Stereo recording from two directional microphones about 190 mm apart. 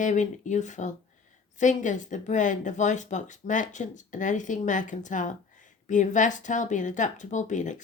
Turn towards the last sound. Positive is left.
turn(degrees=40)  # may be behind; listen again after turning